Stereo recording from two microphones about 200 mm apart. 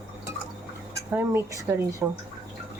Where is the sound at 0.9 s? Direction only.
15° right (ahead or behind).